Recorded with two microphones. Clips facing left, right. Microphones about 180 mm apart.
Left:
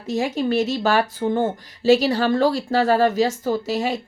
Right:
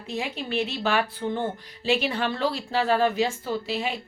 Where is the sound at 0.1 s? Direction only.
45° left (ahead or behind).